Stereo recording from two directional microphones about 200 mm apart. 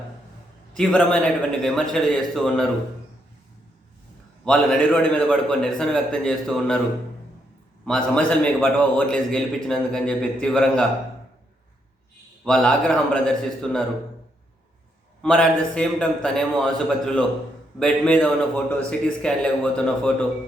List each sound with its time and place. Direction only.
0.8 s a man's voice: 5° left (ahead or behind)
4.4 s a man's voice: 5° left (ahead or behind)
7.9 s a man's voice: 5° left (ahead or behind)
12.5 s a man's voice: 5° left (ahead or behind)
15.2 s a man's voice: 5° left (ahead or behind)